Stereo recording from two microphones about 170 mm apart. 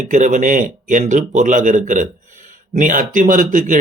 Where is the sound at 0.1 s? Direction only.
45° right (ahead or behind).